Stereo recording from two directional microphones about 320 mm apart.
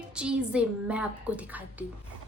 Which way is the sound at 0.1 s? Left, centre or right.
Centre.